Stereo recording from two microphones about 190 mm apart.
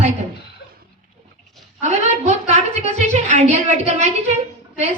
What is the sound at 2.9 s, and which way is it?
A woman's voice, 35° right (ahead or behind).